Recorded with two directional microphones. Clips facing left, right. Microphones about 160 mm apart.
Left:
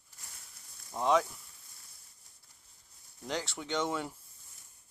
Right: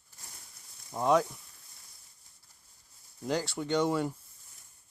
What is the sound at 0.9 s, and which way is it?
Speech, 5° right (ahead or behind).